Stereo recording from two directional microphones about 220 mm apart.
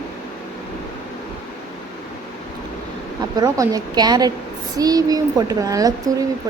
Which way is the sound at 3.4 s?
15° right (ahead or behind).